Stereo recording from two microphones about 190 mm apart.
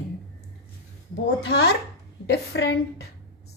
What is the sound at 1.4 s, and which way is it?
A woman's voice, 60° left (ahead or behind).